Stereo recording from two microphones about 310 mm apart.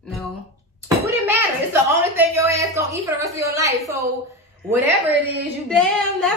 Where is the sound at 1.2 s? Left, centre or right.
Centre.